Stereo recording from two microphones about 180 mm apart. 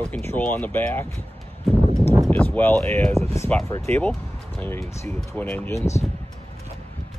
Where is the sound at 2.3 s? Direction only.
10° left (ahead or behind).